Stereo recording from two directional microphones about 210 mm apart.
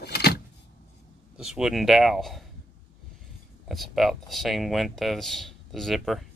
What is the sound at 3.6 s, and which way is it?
Speech, centre (ahead or behind).